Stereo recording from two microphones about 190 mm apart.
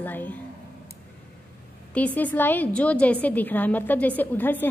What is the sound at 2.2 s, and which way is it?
A woman's voice, 10° left (ahead or behind).